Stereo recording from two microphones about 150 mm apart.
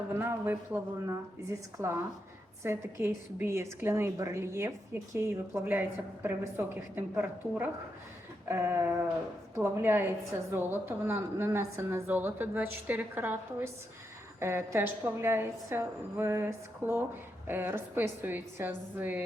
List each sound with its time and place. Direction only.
0.1 s a woman's voice: 15° right (ahead or behind)